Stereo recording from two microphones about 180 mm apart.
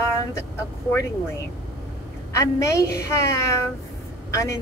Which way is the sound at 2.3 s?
15° left (ahead or behind).